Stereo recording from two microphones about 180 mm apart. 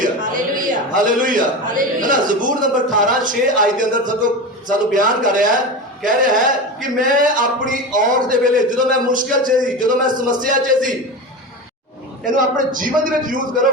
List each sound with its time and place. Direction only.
0.0 s a man's voice: 50° right (ahead or behind)
12.2 s a man's voice: 50° right (ahead or behind)